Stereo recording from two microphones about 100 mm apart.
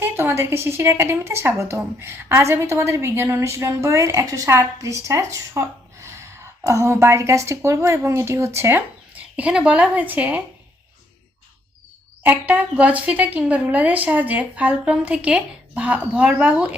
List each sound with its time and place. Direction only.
0.0 s a woman's voice: 20° right (ahead or behind)
9.1 s a woman's voice: 15° right (ahead or behind)
12.2 s a woman's voice: 15° right (ahead or behind)